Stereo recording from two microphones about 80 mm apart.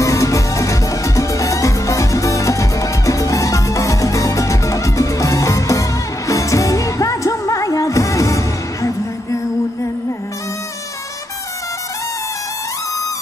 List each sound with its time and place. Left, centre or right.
0.0 s music: left